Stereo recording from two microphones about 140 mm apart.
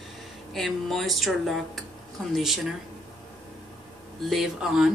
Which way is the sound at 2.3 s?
Centre (ahead or behind).